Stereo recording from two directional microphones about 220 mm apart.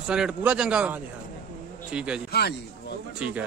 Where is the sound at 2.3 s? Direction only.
45° left (ahead or behind).